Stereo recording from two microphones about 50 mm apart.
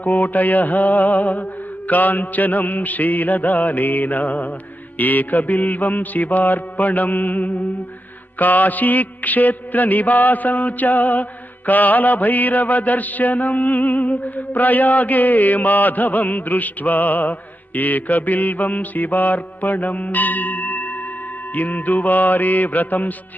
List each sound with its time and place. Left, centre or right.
0.0 s music: left